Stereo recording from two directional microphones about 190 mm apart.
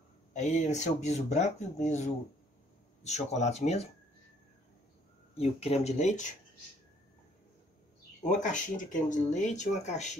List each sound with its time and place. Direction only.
0.3 s speech: 40° left (ahead or behind)
5.3 s speech: 35° left (ahead or behind)
8.2 s speech: 40° left (ahead or behind)